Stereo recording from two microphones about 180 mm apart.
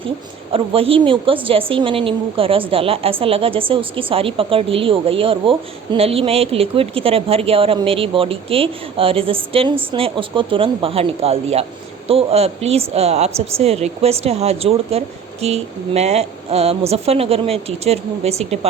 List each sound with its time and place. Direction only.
0.5 s a woman's voice: 30° right (ahead or behind)